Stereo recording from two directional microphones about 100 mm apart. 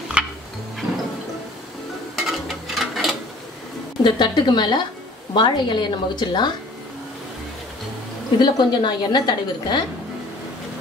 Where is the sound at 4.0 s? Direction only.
50° left (ahead or behind).